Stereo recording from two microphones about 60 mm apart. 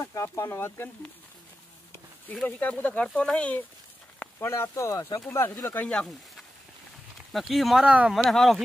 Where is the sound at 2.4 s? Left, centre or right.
Left.